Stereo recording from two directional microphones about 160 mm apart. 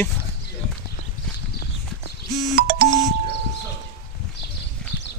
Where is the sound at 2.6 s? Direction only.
70° right (ahead or behind).